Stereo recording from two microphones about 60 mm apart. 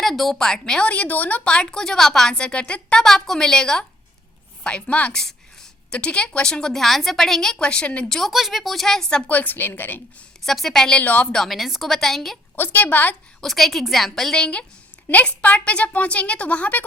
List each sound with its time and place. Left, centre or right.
0.0 s a woman's voice: centre
0.9 s a woman's voice: left
3.0 s a woman's voice: centre
8.1 s a woman's voice: centre
9.0 s a woman's voice: centre
9.3 s a woman's voice: left
10.4 s a woman's voice: centre
11.0 s a woman's voice: left
11.4 s a woman's voice: centre
12.5 s a woman's voice: left
13.4 s a woman's voice: centre
14.3 s a woman's voice: centre